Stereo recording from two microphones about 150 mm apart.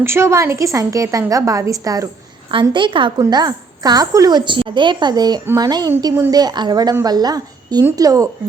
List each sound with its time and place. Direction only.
0.0 s a woman's voice: 15° right (ahead or behind)